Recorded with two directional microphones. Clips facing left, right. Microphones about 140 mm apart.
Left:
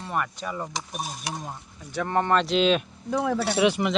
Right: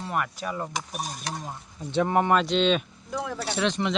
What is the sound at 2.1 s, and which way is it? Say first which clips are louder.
Speech: left 1 dB; 10° right (ahead or behind).